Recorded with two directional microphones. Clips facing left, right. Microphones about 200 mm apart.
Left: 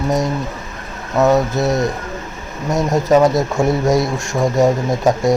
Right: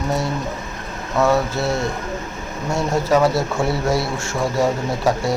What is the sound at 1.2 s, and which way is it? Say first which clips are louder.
Speech: left 4 dB; 20° left (ahead or behind).